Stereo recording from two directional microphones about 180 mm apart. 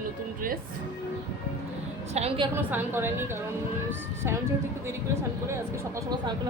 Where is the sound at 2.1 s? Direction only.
35° right (ahead or behind).